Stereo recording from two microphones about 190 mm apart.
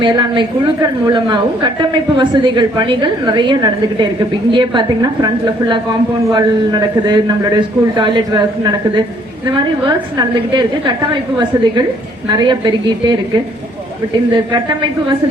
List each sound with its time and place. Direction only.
0.0 s a woman's voice: 25° right (ahead or behind)
14.3 s a woman's voice: 25° right (ahead or behind)